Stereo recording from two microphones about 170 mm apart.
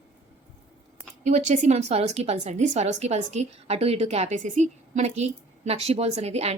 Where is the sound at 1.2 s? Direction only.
45° right (ahead or behind).